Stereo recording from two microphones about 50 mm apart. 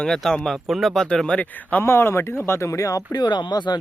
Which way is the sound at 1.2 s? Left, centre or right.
Left.